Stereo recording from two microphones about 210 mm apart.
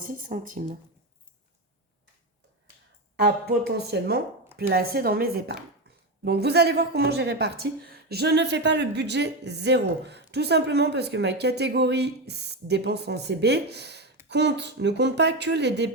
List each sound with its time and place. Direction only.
0.0 s speech: 40° right (ahead or behind)
3.2 s speech: 50° right (ahead or behind)